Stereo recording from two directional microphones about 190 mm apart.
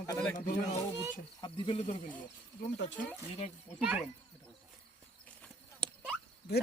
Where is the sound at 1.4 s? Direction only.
25° left (ahead or behind).